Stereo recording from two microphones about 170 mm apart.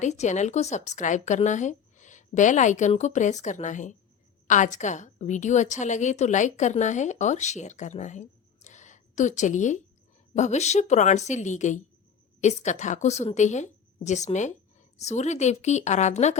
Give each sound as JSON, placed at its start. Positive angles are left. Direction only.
{"t": 0.0, "sound": "a woman's voice", "side_deg": 45}